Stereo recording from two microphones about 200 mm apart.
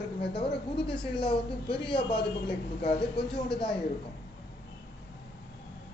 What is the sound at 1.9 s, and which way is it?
A man's voice, 25° left (ahead or behind).